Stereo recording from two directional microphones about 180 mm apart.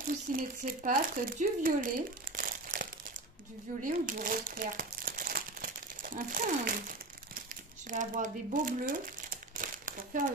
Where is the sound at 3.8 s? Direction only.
50° right (ahead or behind).